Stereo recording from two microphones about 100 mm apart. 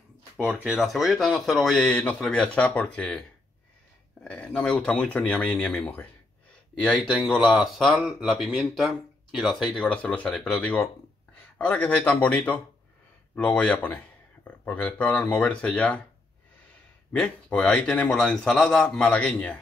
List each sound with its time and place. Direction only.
0.4 s speech: 10° right (ahead or behind)
0.7 s speech: centre (ahead or behind)
1.9 s a man's voice: 10° left (ahead or behind)
9.8 s a man's voice: 15° left (ahead or behind)
17.2 s a man's voice: 10° left (ahead or behind)